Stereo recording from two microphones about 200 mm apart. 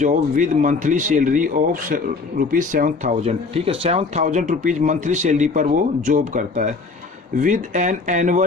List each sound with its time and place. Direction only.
0.0 s speech: 40° right (ahead or behind)